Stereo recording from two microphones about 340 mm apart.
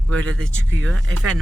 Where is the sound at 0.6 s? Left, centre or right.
Right.